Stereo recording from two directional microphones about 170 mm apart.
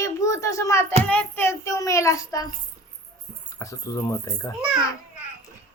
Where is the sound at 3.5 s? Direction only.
20° left (ahead or behind).